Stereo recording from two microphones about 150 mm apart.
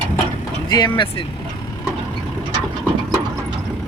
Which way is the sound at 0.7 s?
30° left (ahead or behind).